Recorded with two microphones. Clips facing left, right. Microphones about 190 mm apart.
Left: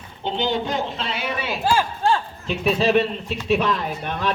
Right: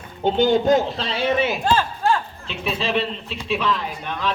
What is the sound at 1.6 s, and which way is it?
Speech, 10° left (ahead or behind).